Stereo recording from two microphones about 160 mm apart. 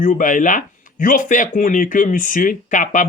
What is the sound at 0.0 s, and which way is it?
Speech, 55° left (ahead or behind).